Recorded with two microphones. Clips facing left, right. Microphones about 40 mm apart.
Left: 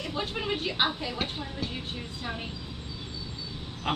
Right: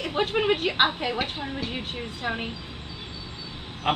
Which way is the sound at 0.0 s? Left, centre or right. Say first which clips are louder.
Right 8 dB; right.